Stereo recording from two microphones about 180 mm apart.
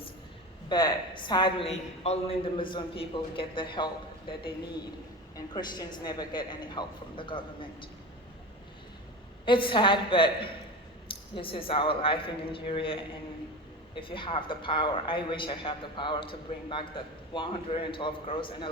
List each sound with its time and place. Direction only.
0.7 s a woman's voice: 25° left (ahead or behind)
5.5 s a woman's voice: 25° left (ahead or behind)
9.5 s a woman's voice: 25° left (ahead or behind)